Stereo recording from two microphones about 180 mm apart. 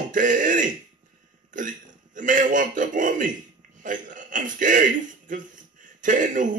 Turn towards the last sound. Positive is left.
turn(degrees=-45)  # may be behind; listen again after turning